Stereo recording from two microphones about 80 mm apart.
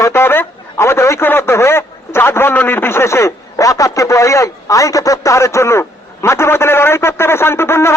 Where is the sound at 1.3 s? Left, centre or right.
Left.